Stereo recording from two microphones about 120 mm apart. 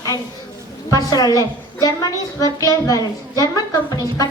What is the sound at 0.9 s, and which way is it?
A woman's voice, 30° left (ahead or behind).